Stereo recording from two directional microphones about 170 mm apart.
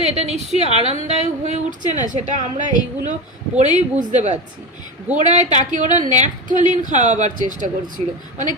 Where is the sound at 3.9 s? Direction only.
45° right (ahead or behind).